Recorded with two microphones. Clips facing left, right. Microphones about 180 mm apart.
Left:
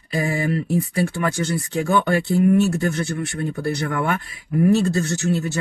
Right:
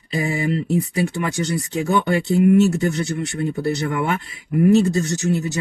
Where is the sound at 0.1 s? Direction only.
20° right (ahead or behind).